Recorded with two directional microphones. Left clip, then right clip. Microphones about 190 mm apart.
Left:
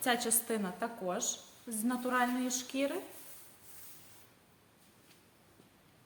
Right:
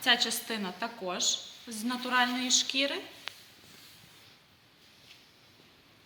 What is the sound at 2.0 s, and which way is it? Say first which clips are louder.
Speech: right 6 dB; 55° left (ahead or behind).